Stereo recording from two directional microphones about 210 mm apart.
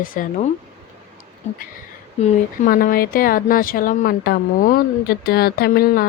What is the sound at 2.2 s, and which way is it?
Speech, 40° left (ahead or behind).